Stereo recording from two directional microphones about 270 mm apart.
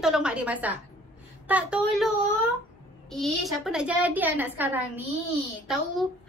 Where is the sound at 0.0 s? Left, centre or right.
Centre.